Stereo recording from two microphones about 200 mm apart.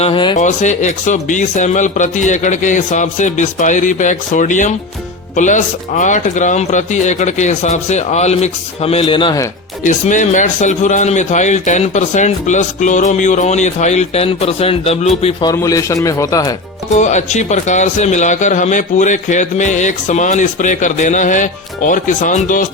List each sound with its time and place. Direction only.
0.0 s a man's voice: 25° left (ahead or behind)
0.3 s speech: 35° left (ahead or behind); by 9.5 s 20° left (ahead or behind)
9.8 s a man's voice: 40° left (ahead or behind); by 16.6 s 15° left (ahead or behind)
16.9 s speech: 35° left (ahead or behind)